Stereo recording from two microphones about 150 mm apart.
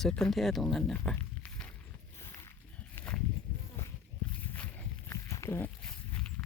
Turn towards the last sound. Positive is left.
turn(degrees=10)  # may be behind; listen again after turning